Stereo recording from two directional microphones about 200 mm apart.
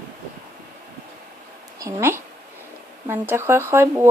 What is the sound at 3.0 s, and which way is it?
Speech, 10° right (ahead or behind).